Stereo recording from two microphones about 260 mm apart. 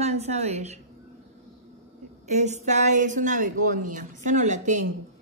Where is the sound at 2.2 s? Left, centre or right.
Right.